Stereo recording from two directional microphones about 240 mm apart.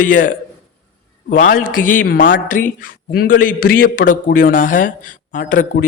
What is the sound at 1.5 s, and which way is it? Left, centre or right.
A man's voice, left.